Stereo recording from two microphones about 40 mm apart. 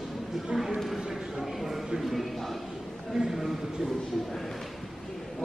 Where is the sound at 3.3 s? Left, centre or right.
Centre.